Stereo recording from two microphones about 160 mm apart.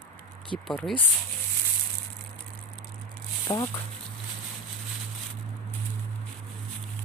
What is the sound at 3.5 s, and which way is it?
Speech, 30° left (ahead or behind).